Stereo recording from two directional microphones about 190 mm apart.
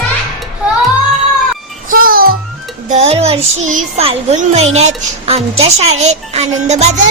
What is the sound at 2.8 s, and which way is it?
Child singing, 35° right (ahead or behind).